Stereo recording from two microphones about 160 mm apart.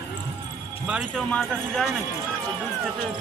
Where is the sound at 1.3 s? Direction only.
5° left (ahead or behind).